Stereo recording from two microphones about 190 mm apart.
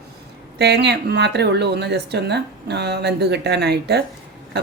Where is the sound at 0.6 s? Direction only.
65° right (ahead or behind).